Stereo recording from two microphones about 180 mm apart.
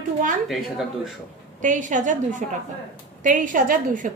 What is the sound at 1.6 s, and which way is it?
A woman's voice, 45° right (ahead or behind).